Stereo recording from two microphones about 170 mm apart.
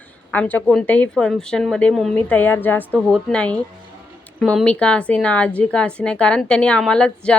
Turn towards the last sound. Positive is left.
turn(degrees=5)  # may be behind; listen again after turning